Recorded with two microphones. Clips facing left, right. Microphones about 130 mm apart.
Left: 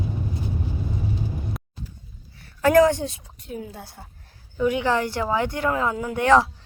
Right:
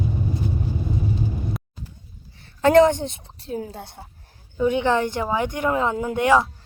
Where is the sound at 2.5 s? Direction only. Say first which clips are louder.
Right 2 dB; 25° right (ahead or behind).